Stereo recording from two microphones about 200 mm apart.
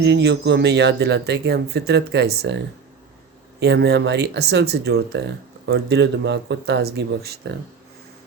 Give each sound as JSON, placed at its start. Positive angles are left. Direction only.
{"t": 0.0, "sound": "speech", "side_deg": -60}
{"t": 3.6, "sound": "speech", "side_deg": -55}